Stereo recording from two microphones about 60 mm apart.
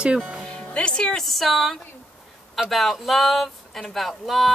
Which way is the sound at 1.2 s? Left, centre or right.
Centre.